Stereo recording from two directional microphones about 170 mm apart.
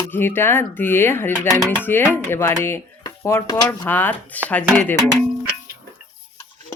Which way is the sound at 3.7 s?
10° left (ahead or behind).